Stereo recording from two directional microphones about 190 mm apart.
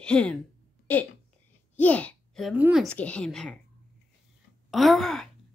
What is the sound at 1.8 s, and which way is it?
A child's voice, 10° left (ahead or behind).